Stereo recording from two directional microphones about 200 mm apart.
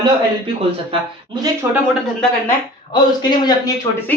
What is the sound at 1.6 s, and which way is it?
Speech, 10° right (ahead or behind).